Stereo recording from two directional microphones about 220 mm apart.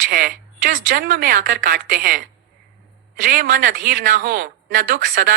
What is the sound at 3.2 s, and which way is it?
Speech, 40° right (ahead or behind).